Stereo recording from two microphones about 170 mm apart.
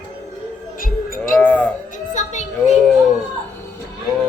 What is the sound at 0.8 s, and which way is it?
Speech, 55° left (ahead or behind).